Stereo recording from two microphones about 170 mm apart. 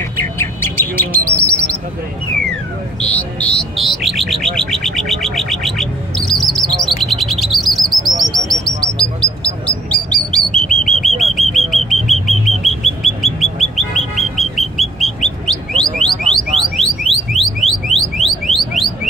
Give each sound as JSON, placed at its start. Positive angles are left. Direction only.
{"t": 0.2, "sound": "bird", "side_deg": 15}